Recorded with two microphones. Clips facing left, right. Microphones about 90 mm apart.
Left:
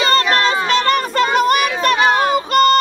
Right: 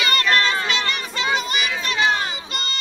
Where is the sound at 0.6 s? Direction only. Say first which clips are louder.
Left 9 dB; 45° left (ahead or behind).